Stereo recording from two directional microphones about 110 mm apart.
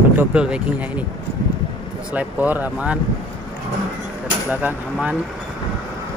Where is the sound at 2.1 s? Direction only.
15° right (ahead or behind).